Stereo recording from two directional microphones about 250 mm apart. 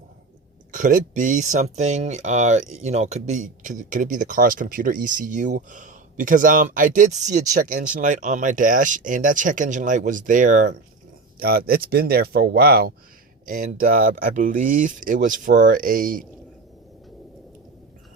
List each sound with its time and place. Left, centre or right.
0.7 s speech: right